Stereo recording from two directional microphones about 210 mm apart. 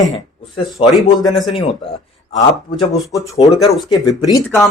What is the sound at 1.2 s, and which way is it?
Speech, centre (ahead or behind).